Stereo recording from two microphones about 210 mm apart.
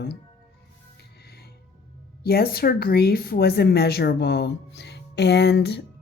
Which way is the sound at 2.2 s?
45° left (ahead or behind).